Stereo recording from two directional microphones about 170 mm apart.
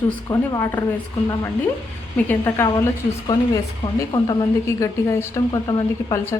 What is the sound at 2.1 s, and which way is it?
A woman's voice, 10° left (ahead or behind).